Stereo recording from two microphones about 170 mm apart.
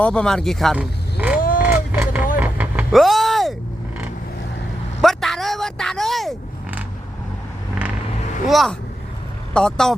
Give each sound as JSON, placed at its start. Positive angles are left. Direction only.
{"t": 0.0, "sound": "speech", "side_deg": 5}
{"t": 1.4, "sound": "vehicle", "side_deg": 55}
{"t": 1.6, "sound": "a sound", "side_deg": -10}
{"t": 2.3, "sound": "vehicle", "side_deg": -10}
{"t": 2.9, "sound": "vehicle", "side_deg": 0}
{"t": 5.0, "sound": "a sound", "side_deg": 0}
{"t": 8.4, "sound": "speech", "side_deg": 0}